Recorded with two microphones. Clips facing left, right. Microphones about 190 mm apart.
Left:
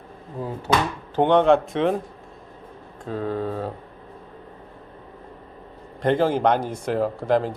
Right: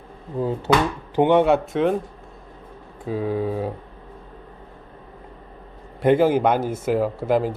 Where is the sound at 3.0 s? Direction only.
10° right (ahead or behind).